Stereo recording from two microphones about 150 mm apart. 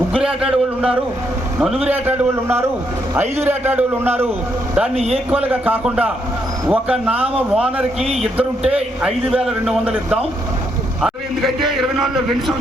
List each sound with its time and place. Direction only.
0.1 s a man's voice: 5° right (ahead or behind)
4.9 s a man's voice: 40° right (ahead or behind)
5.3 s a man's voice: 10° right (ahead or behind)